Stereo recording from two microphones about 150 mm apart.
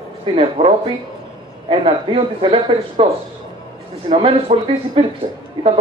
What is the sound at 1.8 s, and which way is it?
Speech, 35° right (ahead or behind).